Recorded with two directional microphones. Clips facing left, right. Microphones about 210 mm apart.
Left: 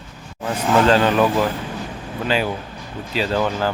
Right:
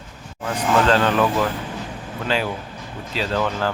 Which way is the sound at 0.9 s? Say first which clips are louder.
Left 2 dB; 10° left (ahead or behind).